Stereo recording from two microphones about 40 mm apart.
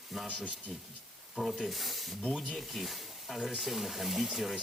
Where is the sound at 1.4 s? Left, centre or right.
Centre.